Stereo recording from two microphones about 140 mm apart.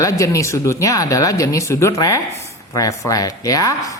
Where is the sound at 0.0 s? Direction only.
25° left (ahead or behind).